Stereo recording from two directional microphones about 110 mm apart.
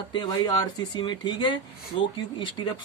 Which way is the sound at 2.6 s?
40° left (ahead or behind).